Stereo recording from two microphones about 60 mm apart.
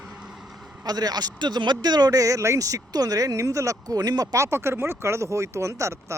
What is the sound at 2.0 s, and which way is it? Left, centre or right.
Speech, right.